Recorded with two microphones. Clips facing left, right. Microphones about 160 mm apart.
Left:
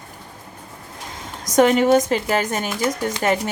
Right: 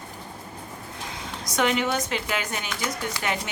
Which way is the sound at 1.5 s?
45° left (ahead or behind).